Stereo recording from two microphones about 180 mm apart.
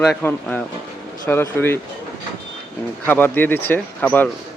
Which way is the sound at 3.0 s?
10° left (ahead or behind).